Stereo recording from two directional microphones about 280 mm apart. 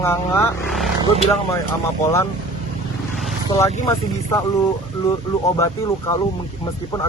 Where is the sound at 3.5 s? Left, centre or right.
Centre.